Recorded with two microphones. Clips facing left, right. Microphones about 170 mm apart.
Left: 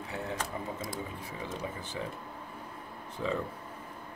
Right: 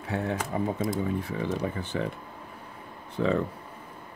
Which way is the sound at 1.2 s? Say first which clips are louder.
Right 8 dB; 65° right (ahead or behind).